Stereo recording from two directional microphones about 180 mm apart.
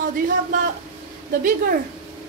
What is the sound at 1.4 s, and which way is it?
Speech, 50° right (ahead or behind).